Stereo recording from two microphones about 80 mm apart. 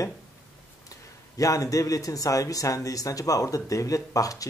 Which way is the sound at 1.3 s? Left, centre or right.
Left.